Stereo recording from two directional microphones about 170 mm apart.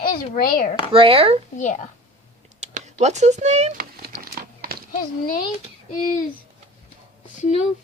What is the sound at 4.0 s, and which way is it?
Crumpling, 60° right (ahead or behind).